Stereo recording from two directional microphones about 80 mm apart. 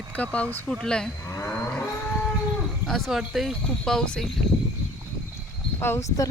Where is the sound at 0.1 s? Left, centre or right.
Centre.